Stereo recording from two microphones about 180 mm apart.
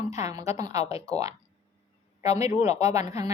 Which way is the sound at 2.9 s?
20° right (ahead or behind).